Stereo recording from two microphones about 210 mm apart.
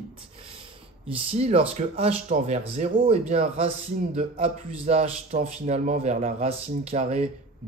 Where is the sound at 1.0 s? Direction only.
25° right (ahead or behind).